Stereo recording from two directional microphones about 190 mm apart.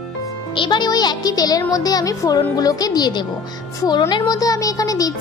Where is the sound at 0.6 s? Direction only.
25° left (ahead or behind).